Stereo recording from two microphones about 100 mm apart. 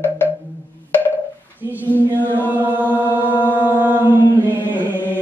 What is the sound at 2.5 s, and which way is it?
Music, 15° right (ahead or behind).